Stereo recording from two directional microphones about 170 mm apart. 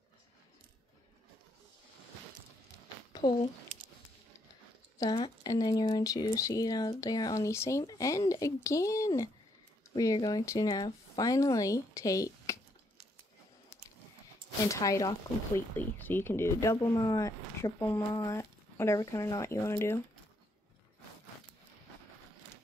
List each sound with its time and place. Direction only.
3.1 s a sound: 30° left (ahead or behind)
4.9 s speech: 25° left (ahead or behind)
14.7 s speech: 20° left (ahead or behind)